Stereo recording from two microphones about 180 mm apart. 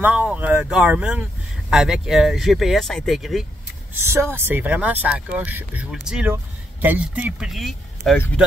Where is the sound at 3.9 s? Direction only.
15° right (ahead or behind).